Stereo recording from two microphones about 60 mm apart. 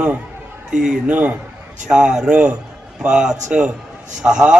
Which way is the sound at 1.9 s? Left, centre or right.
Centre.